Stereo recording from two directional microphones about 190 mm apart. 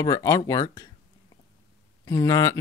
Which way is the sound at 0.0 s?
15° left (ahead or behind).